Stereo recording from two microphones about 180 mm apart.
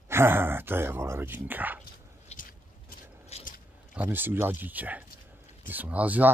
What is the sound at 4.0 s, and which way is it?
Speech, 10° right (ahead or behind).